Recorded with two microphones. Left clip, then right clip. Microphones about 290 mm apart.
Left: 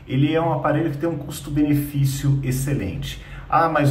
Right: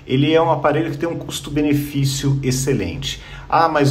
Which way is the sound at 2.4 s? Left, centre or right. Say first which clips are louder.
Right 7 dB; centre.